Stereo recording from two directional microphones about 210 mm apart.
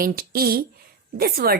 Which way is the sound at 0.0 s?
45° right (ahead or behind).